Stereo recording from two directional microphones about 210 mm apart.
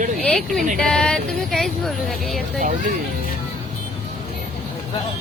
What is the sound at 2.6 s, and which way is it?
Speech, 40° right (ahead or behind).